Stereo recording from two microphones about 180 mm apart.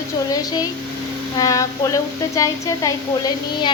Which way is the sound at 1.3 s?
20° left (ahead or behind).